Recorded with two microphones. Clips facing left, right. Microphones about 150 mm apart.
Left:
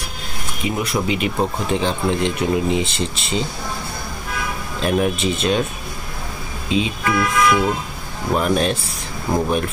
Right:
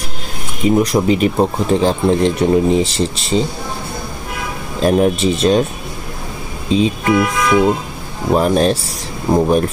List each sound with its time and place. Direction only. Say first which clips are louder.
0.7 s speech: right 9 dB; 40° right (ahead or behind)
4.8 s speech: right 6 dB; 35° right (ahead or behind)
6.7 s speech: right 6 dB; 35° right (ahead or behind)
8.3 s speech: right 5 dB; 35° right (ahead or behind)